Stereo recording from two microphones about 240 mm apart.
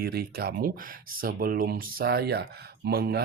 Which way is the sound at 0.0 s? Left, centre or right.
Right.